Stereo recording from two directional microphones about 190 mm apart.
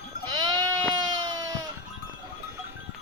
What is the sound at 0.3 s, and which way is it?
Sheep, 20° right (ahead or behind).